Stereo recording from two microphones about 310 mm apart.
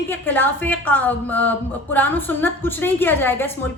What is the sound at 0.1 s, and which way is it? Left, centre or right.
A woman's voice, centre.